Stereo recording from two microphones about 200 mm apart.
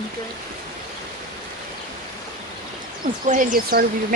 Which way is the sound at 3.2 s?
40° right (ahead or behind).